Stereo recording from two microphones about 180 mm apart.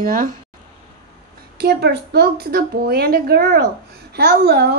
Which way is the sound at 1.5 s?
65° right (ahead or behind).